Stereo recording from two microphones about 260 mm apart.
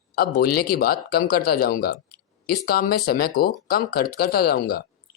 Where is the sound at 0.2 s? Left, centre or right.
Left.